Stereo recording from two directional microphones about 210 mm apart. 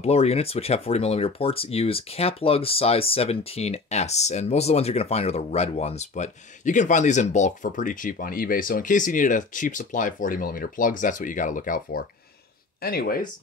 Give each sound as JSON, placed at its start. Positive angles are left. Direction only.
{"t": 0.0, "sound": "speech", "side_deg": 30}